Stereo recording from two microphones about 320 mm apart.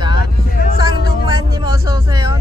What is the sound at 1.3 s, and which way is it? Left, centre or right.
Speech, centre.